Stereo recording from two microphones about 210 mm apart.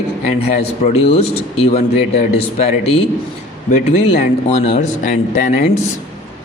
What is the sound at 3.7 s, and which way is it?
Speech, 35° left (ahead or behind).